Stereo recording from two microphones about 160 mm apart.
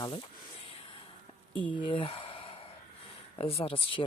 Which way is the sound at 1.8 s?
35° left (ahead or behind).